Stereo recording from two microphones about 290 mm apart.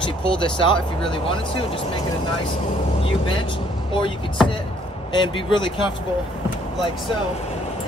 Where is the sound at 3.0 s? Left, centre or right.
Centre.